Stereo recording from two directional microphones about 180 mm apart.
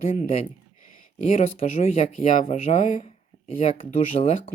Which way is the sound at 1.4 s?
35° left (ahead or behind).